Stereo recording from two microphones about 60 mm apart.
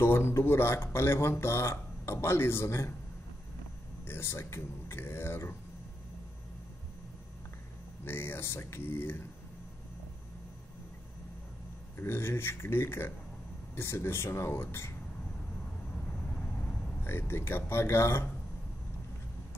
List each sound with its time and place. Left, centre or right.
0.0 s speech: left
4.0 s speech: left
8.0 s speech: left
12.0 s speech: left
16.5 s a man's voice: left